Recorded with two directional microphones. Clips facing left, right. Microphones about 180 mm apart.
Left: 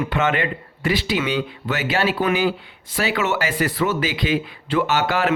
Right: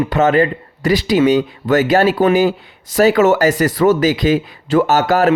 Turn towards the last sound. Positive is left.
turn(degrees=-40)  # may be behind; listen again after turning